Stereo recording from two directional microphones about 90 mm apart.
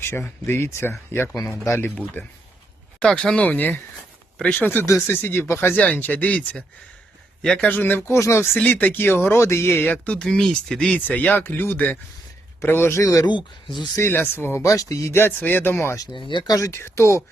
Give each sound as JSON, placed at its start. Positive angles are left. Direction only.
{"t": 0.0, "sound": "speech", "side_deg": 25}
{"t": 3.0, "sound": "speech", "side_deg": 10}
{"t": 4.6, "sound": "speech", "side_deg": 25}
{"t": 8.6, "sound": "speech", "side_deg": 20}
{"t": 10.2, "sound": "speech", "side_deg": 5}
{"t": 13.2, "sound": "speech", "side_deg": 60}
{"t": 14.1, "sound": "speech", "side_deg": 25}
{"t": 16.1, "sound": "speech", "side_deg": 60}
{"t": 16.6, "sound": "speech", "side_deg": 30}